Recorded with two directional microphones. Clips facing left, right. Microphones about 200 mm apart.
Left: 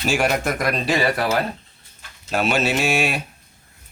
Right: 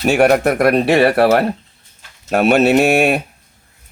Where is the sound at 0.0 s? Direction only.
60° right (ahead or behind).